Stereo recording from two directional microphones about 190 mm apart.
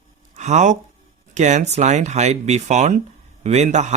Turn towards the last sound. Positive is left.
turn(degrees=-40)  # may be behind; listen again after turning